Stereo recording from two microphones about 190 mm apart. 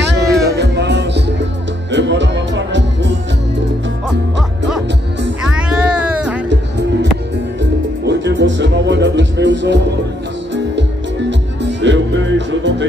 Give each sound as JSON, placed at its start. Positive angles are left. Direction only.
{"t": 0.0, "sound": "music", "side_deg": -65}
{"t": 4.4, "sound": "music", "side_deg": 0}
{"t": 8.0, "sound": "music", "side_deg": -65}